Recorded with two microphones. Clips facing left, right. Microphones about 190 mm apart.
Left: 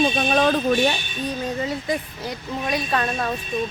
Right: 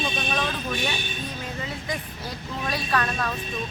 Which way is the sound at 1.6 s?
25° left (ahead or behind).